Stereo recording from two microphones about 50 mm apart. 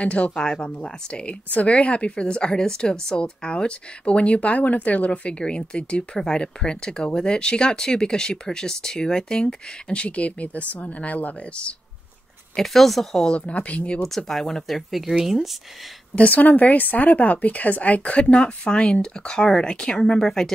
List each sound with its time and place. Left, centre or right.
0.0 s a woman's voice: left
12.5 s speech: centre
13.2 s a woman's voice: left
14.0 s speech: centre
14.9 s speech: centre
16.2 s a woman's voice: left; by 20.5 s centre